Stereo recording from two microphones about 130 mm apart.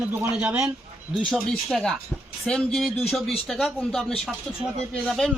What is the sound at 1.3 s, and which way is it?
Speech, 5° left (ahead or behind).